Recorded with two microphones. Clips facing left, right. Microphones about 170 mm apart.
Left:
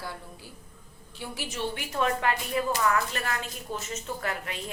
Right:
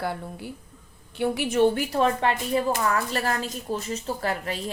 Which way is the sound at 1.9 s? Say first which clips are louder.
Right 4 dB; 30° right (ahead or behind).